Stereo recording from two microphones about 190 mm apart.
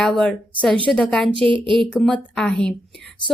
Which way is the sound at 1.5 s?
25° right (ahead or behind).